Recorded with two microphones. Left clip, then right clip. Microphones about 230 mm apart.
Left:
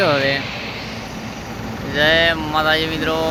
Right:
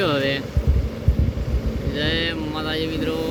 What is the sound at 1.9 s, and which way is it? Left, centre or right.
Speech, centre.